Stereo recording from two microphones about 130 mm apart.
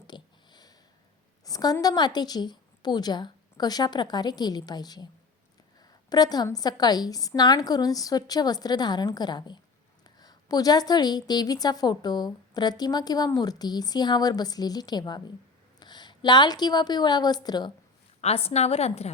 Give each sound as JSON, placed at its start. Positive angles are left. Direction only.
{"t": 0.1, "sound": "a sound", "side_deg": 35}
{"t": 1.5, "sound": "a woman's voice", "side_deg": 30}
{"t": 18.2, "sound": "a woman's voice", "side_deg": 50}